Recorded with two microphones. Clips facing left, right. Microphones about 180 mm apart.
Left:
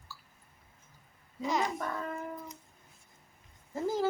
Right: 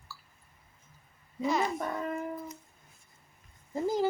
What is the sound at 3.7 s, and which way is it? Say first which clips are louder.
Speech: right 2 dB; 15° right (ahead or behind).